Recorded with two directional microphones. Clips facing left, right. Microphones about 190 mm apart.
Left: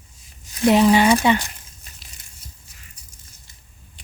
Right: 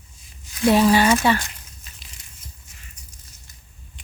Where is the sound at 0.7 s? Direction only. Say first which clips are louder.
Left 1 dB; 20° left (ahead or behind).